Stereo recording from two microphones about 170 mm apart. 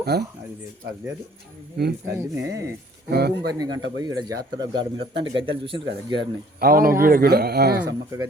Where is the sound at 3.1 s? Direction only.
70° right (ahead or behind).